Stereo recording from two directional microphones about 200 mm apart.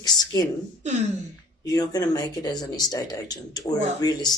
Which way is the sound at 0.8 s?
35° right (ahead or behind).